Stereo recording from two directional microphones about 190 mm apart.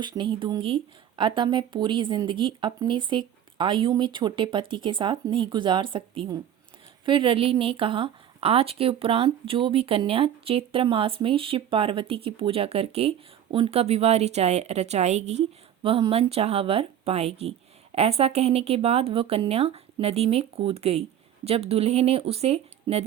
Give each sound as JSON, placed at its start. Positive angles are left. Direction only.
{"t": 0.0, "sound": "a woman's voice", "side_deg": -25}